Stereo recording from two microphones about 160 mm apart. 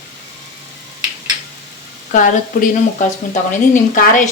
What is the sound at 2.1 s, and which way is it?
Speech, 55° left (ahead or behind).